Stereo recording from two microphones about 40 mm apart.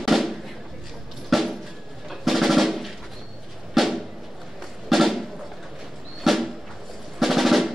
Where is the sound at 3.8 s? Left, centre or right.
Centre.